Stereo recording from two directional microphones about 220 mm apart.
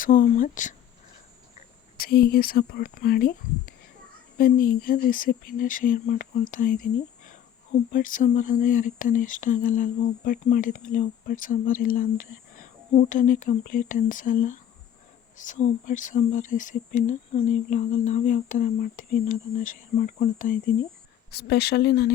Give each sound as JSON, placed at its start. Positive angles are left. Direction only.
{"t": 0.0, "sound": "speech", "side_deg": 35}
{"t": 2.0, "sound": "speech", "side_deg": 45}
{"t": 7.9, "sound": "speech", "side_deg": 35}
{"t": 21.2, "sound": "speech", "side_deg": 45}